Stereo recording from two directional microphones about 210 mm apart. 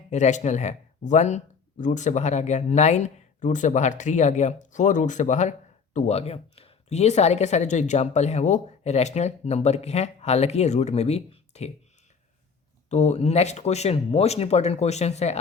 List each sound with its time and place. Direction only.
0.1 s speech: 35° left (ahead or behind)
12.9 s speech: 30° left (ahead or behind)